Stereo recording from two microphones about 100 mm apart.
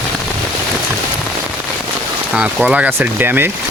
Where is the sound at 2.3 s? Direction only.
10° right (ahead or behind).